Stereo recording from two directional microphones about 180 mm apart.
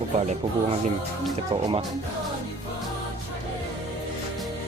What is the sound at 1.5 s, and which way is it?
Speech, 25° right (ahead or behind).